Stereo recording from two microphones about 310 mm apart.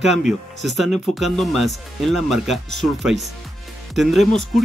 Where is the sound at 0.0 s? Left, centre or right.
Centre.